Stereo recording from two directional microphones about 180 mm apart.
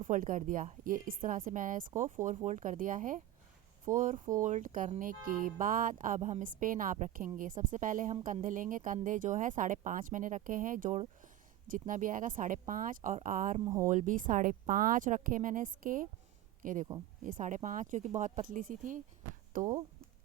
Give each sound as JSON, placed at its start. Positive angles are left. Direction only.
{"t": 0.0, "sound": "speech", "side_deg": -45}